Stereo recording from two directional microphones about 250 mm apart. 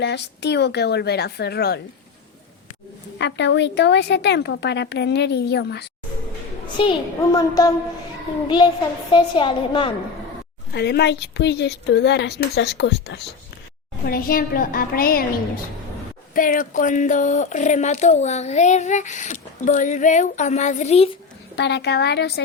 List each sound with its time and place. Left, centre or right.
0.0 s speech: left
3.2 s a woman's voice: left
6.7 s a woman's voice: centre
10.8 s a woman's voice: left
16.3 s speech: left
21.5 s speech: left